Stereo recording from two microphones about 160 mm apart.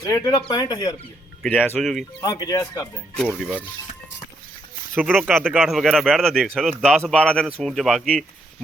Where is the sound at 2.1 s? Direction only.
25° left (ahead or behind).